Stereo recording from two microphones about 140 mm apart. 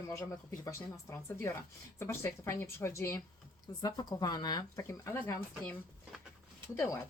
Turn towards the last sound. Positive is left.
turn(degrees=20)  # may be behind; listen again after turning